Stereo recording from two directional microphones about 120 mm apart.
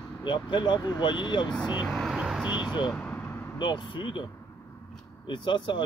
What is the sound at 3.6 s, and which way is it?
Speech, 40° left (ahead or behind).